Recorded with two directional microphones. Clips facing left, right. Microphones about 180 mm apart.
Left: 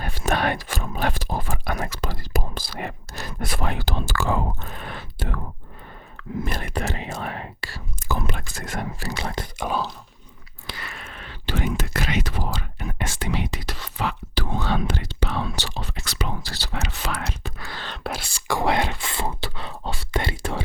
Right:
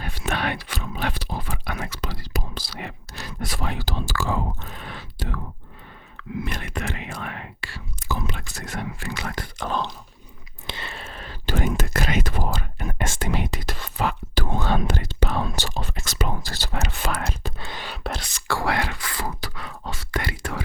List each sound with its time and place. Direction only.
0.0 s speech: 45° left (ahead or behind)
6.1 s whispering: 40° left (ahead or behind)
8.7 s speech: 40° left (ahead or behind)
9.1 s speech: 25° left (ahead or behind)
9.6 s speech: 10° left (ahead or behind)
10.7 s speech: 25° right (ahead or behind); by 17.5 s 45° right (ahead or behind)
17.6 s speech: 20° right (ahead or behind)
17.8 s speech: 5° right (ahead or behind)
18.4 s speech: 20° left (ahead or behind)